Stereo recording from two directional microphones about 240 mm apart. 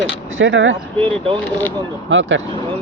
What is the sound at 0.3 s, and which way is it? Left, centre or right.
Speech, right.